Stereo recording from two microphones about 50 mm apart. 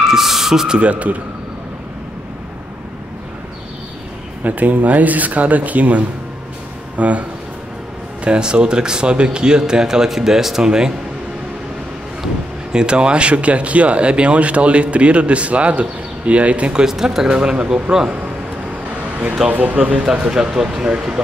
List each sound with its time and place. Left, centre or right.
0.1 s speech: centre
0.7 s speech: right
4.4 s speech: right; by 10.9 s centre
12.7 s speech: centre
16.8 s speech: centre
19.5 s speech: right
20.1 s speech: centre